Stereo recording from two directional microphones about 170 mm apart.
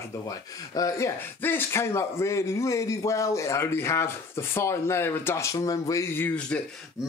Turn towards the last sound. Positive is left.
turn(degrees=5)  # may be behind; listen again after turning